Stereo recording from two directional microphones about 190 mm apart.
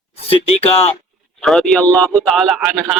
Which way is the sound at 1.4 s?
Centre (ahead or behind).